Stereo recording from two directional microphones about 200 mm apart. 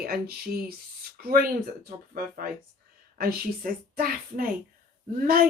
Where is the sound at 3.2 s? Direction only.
50° right (ahead or behind).